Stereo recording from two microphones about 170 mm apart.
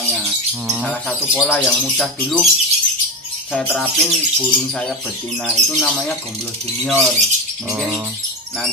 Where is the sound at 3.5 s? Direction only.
5° left (ahead or behind).